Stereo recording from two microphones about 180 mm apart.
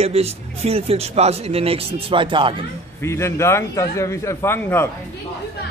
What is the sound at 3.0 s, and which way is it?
A man's voice, 15° left (ahead or behind).